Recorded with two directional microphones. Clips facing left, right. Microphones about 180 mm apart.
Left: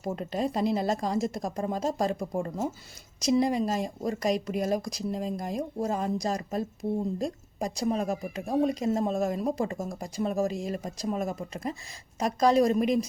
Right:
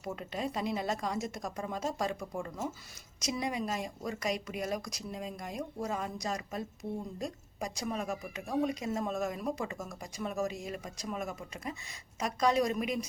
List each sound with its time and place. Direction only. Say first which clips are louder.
0.0 s a woman's voice: left 7 dB; 35° left (ahead or behind)